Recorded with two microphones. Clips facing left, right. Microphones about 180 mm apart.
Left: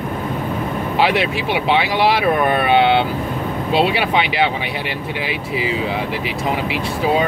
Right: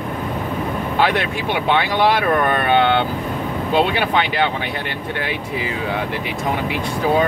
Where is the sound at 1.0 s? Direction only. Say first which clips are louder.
Left 2 dB; 10° left (ahead or behind).